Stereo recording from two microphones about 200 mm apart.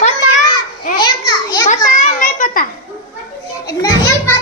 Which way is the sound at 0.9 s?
20° left (ahead or behind).